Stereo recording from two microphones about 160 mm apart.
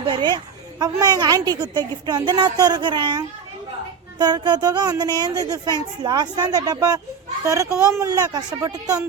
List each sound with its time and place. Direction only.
0.1 s a woman's voice: 30° right (ahead or behind)